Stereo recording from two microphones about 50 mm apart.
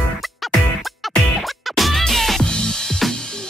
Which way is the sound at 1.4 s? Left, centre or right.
Centre.